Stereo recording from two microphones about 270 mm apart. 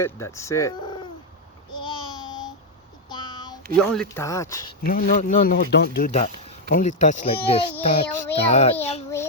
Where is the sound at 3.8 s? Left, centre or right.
Centre.